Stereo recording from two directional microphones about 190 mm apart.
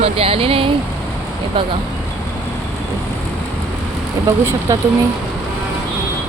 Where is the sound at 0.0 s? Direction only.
30° right (ahead or behind).